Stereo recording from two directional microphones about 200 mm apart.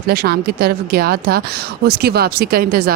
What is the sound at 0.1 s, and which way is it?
A woman's voice, 50° right (ahead or behind).